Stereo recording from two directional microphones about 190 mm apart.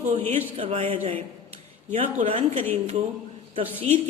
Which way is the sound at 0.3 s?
30° right (ahead or behind).